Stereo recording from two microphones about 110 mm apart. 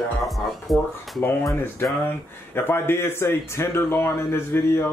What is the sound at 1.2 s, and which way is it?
Speech, 20° left (ahead or behind).